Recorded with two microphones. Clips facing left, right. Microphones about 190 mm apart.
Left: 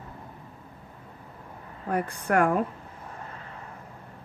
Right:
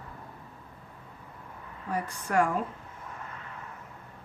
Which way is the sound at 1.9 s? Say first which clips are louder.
Left 3 dB; 60° left (ahead or behind).